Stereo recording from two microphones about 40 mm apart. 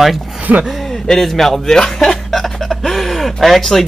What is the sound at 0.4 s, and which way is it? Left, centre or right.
Speech, right.